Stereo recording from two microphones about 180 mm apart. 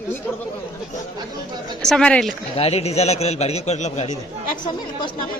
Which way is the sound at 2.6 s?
35° left (ahead or behind).